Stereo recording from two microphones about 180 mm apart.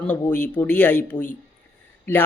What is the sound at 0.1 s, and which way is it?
Speech, 10° left (ahead or behind).